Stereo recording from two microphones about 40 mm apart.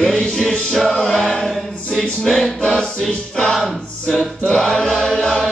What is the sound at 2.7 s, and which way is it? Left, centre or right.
Music, centre.